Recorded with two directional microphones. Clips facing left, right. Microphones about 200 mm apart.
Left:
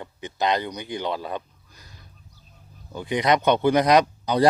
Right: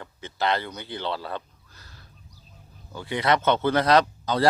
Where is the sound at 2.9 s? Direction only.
15° left (ahead or behind).